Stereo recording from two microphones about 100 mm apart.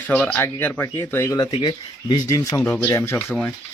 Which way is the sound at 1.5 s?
50° left (ahead or behind).